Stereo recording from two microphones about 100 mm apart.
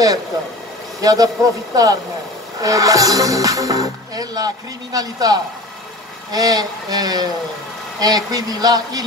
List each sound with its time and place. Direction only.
1.0 s speech: 35° right (ahead or behind)